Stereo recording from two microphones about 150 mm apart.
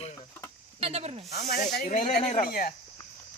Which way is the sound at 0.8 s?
40° right (ahead or behind).